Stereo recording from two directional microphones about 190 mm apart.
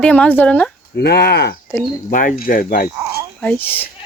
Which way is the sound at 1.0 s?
60° left (ahead or behind).